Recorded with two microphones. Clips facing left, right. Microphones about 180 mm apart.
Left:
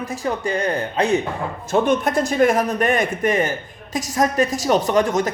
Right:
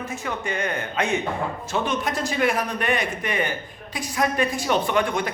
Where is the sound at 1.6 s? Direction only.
50° left (ahead or behind).